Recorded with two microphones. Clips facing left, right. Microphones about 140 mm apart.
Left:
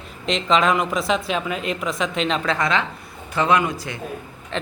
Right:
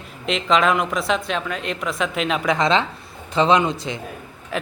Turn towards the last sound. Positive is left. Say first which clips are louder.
# right 2 dB
turn(degrees=-25)  # may be behind; listen again after turning